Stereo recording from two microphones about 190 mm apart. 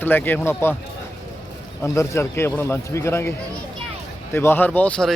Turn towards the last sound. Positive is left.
turn(degrees=5)  # may be behind; listen again after turning